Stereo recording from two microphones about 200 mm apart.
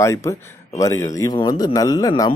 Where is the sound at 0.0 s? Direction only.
15° left (ahead or behind).